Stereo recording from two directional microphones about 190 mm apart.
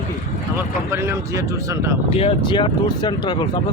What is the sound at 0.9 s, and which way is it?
Speech, 15° right (ahead or behind).